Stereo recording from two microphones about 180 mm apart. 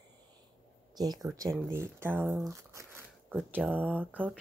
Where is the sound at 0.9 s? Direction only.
20° right (ahead or behind).